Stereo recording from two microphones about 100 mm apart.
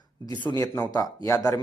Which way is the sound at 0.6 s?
30° left (ahead or behind).